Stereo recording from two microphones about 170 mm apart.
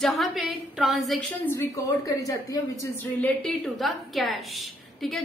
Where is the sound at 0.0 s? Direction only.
Centre (ahead or behind).